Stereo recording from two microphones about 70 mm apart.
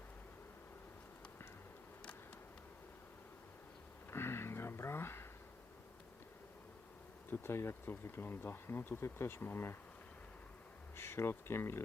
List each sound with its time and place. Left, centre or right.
4.1 s a sound: left
7.3 s speech: left
10.9 s speech: left